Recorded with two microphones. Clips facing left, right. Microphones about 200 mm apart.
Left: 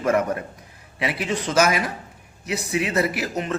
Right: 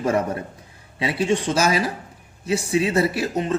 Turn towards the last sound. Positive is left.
turn(degrees=-30)  # may be behind; listen again after turning